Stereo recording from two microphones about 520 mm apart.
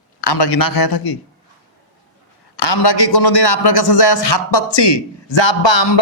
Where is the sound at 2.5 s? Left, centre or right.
Left.